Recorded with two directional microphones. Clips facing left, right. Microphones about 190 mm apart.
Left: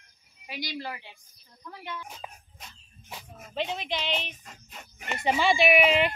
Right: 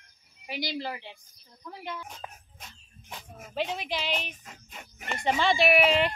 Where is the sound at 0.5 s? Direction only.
25° right (ahead or behind).